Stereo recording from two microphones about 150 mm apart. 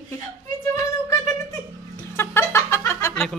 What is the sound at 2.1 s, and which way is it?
Music, 15° left (ahead or behind).